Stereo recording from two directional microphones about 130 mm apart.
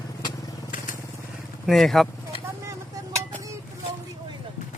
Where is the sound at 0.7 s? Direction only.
90° left.